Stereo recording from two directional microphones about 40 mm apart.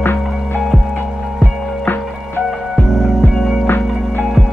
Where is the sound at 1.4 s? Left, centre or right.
Left.